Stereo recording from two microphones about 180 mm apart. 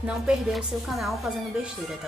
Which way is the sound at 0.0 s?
Centre (ahead or behind).